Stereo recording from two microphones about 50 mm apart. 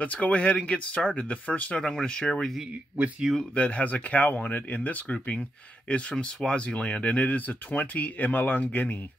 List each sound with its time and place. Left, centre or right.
0.0 s speech: left
1.8 s speech: centre
3.5 s speech: left